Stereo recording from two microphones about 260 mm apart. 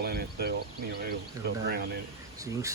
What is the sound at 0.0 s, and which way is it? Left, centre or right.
Speech, right.